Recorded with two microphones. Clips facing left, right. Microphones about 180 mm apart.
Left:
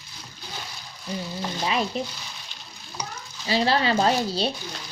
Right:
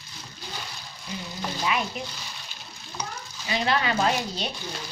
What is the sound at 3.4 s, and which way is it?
Speech, 30° left (ahead or behind).